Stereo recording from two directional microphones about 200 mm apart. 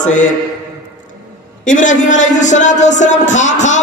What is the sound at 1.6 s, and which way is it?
Speech, 40° left (ahead or behind).